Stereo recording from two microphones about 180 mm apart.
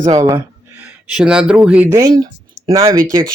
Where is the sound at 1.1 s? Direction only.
5° right (ahead or behind).